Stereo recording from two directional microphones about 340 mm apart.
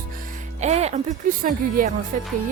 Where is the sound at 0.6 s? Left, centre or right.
Centre.